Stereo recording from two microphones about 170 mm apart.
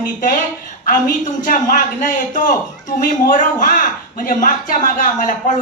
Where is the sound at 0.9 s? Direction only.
50° left (ahead or behind).